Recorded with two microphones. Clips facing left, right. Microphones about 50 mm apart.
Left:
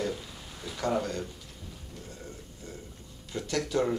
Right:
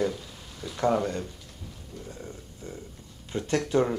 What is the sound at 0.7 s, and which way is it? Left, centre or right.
Speech, right.